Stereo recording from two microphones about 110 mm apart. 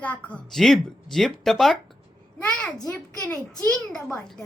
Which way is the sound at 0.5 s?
5° left (ahead or behind).